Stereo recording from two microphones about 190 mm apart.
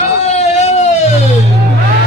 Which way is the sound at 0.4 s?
35° left (ahead or behind).